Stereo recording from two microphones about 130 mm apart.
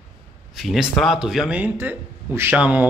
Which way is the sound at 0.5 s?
5° right (ahead or behind).